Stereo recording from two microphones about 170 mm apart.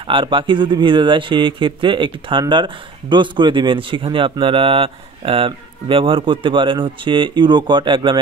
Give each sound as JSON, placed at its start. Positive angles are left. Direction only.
{"t": 0.1, "sound": "speech", "side_deg": -30}